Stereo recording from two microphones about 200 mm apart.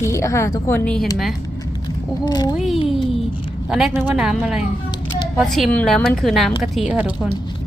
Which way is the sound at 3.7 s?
5° right (ahead or behind).